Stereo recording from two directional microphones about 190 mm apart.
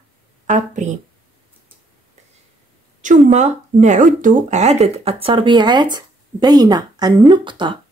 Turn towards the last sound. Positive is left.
turn(degrees=-25)  # may be behind; listen again after turning